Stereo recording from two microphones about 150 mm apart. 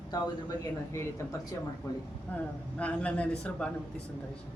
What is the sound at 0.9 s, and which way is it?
Speech, 20° left (ahead or behind).